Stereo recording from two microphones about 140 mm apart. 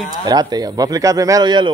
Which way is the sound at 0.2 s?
30° right (ahead or behind).